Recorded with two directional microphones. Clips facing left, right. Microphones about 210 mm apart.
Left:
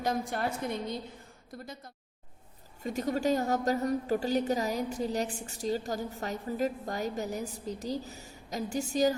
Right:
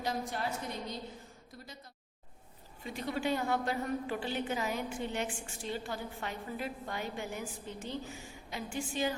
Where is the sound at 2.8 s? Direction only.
45° left (ahead or behind).